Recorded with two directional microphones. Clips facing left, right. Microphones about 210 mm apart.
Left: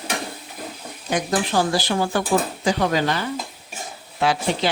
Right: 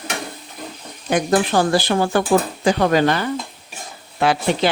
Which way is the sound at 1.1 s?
55° right (ahead or behind).